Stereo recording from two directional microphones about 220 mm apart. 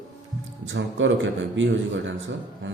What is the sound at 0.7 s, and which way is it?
A man's voice, 55° right (ahead or behind).